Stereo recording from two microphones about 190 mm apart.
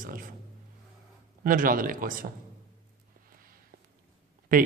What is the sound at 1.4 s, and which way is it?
Speech, 45° right (ahead or behind).